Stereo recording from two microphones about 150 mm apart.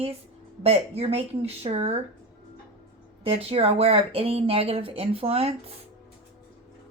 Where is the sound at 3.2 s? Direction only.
40° right (ahead or behind).